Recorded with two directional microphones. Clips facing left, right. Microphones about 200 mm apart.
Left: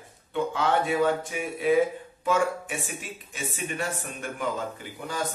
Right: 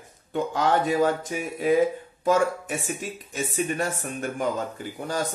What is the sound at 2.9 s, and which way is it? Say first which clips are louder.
Speech: right 6 dB; 40° right (ahead or behind).